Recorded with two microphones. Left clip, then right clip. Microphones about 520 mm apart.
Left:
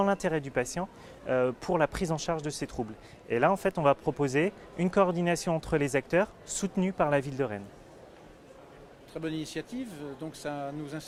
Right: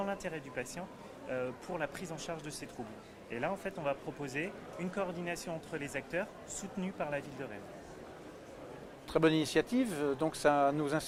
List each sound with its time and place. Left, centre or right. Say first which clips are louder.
0.0 s speech: left 10 dB; left
3.2 s speech: left 12 dB; left
9.1 s speech: right 7 dB; right